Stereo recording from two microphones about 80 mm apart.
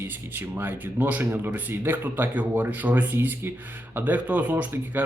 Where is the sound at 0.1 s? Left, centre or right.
Right.